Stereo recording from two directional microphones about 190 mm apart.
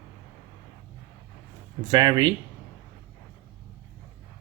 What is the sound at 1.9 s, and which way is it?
Speech, 20° right (ahead or behind).